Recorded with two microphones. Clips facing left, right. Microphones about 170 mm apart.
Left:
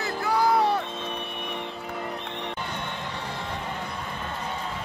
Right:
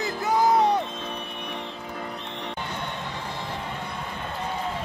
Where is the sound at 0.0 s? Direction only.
20° right (ahead or behind).